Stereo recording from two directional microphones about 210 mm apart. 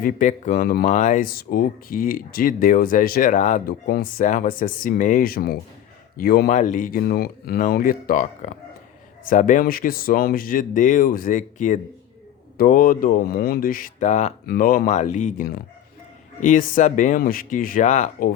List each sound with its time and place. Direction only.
0.0 s speech: 35° left (ahead or behind)